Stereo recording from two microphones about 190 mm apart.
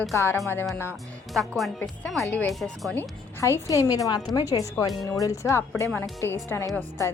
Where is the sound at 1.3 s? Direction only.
Centre (ahead or behind).